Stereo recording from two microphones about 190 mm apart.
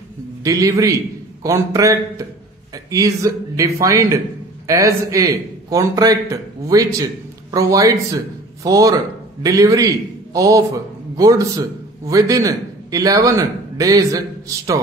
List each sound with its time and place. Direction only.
0.4 s a man's voice: 20° right (ahead or behind)